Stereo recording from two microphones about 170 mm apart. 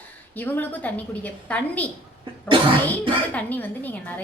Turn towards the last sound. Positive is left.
turn(degrees=10)  # may be behind; listen again after turning